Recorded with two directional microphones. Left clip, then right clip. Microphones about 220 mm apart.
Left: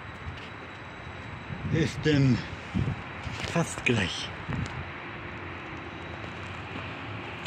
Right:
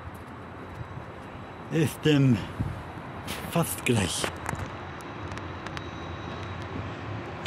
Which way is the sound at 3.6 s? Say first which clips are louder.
Even; 10° right (ahead or behind).